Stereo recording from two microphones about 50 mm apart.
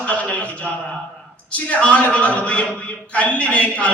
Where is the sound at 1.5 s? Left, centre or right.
Left.